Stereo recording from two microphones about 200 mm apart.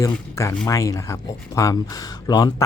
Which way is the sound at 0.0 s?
15° left (ahead or behind).